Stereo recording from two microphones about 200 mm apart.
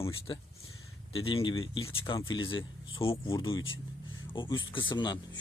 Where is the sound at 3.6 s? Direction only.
80° left.